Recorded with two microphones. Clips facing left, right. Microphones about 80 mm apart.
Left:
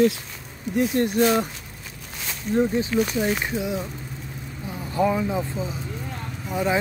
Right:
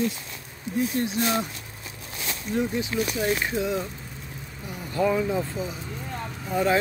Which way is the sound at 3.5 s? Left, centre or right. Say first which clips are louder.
Even; centre.